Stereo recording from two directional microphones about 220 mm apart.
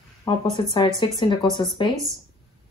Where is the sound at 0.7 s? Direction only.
20° left (ahead or behind).